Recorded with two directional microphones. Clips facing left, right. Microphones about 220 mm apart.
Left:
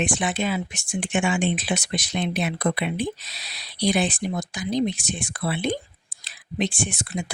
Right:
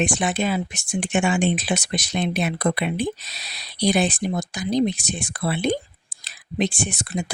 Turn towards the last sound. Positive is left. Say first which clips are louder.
# right 2 dB
turn(degrees=-40)  # may be behind; listen again after turning